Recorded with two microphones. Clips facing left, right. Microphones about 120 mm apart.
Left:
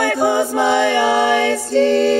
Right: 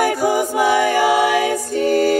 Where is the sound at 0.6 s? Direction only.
25° left (ahead or behind).